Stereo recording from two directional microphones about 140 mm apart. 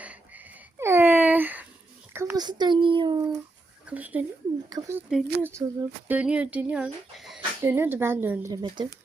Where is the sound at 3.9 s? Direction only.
10° right (ahead or behind).